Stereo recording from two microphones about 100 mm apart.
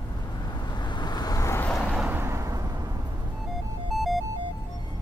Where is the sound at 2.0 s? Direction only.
20° right (ahead or behind).